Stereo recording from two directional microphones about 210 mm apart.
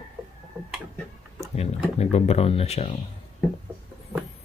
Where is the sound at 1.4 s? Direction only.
30° left (ahead or behind).